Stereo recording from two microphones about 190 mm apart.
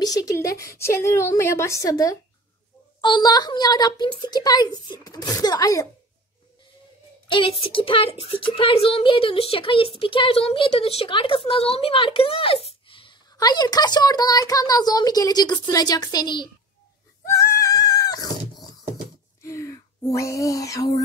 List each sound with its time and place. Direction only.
0.0 s a woman's voice: 20° left (ahead or behind)
7.2 s a woman's voice: 25° left (ahead or behind)
17.3 s goat: 15° left (ahead or behind)
19.4 s a sound: 15° left (ahead or behind)